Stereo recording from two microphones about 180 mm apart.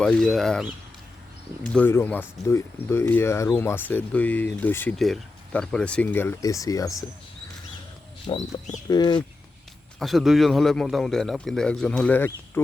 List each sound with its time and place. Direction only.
0.0 s a man's voice: 5° left (ahead or behind)
8.3 s speech: 25° left (ahead or behind)
10.0 s a man's voice: centre (ahead or behind)